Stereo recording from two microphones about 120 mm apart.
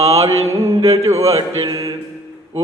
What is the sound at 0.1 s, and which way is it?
Mantra, 25° right (ahead or behind).